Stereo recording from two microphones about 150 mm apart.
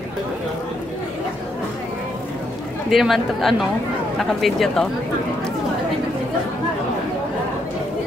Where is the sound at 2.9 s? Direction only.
Centre (ahead or behind).